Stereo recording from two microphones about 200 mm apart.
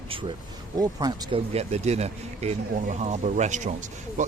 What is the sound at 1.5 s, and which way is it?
Speech, 30° right (ahead or behind).